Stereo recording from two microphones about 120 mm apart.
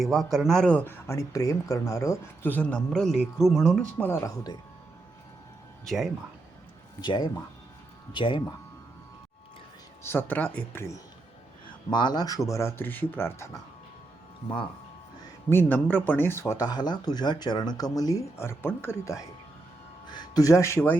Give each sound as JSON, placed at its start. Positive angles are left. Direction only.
{"t": 0.0, "sound": "speech", "side_deg": 0}
{"t": 1.0, "sound": "speech", "side_deg": 25}
{"t": 3.9, "sound": "speech", "side_deg": 20}
{"t": 5.8, "sound": "speech", "side_deg": 0}
{"t": 7.0, "sound": "speech", "side_deg": 40}
{"t": 10.0, "sound": "speech", "side_deg": 20}
{"t": 11.9, "sound": "speech", "side_deg": 40}
{"t": 15.4, "sound": "speech", "side_deg": 15}
{"t": 20.1, "sound": "speech", "side_deg": 35}